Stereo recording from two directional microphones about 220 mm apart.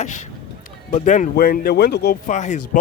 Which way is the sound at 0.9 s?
35° left (ahead or behind).